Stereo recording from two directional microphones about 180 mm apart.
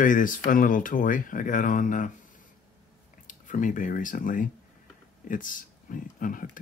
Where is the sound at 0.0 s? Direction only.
45° left (ahead or behind).